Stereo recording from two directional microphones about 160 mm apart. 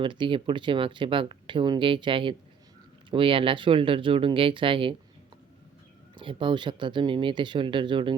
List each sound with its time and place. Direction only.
0.0 s speech: 30° right (ahead or behind)
6.1 s speech: 30° right (ahead or behind)